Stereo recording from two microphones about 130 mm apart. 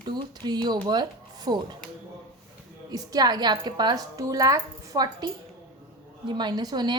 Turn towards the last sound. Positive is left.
turn(degrees=-30)  # may be behind; listen again after turning